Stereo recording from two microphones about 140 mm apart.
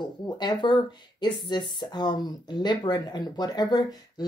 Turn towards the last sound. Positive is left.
turn(degrees=30)  # may be behind; listen again after turning